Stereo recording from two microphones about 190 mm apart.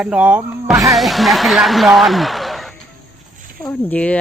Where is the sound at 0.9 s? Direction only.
Centre (ahead or behind).